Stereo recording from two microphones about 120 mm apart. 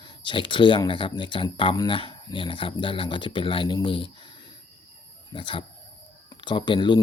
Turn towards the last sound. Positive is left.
turn(degrees=40)  # may be behind; listen again after turning